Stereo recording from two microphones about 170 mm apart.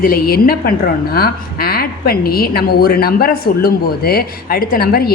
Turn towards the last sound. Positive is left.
turn(degrees=65)  # may be behind; listen again after turning